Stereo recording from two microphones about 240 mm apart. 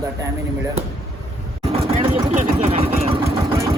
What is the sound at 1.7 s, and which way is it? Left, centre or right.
Vehicle, right.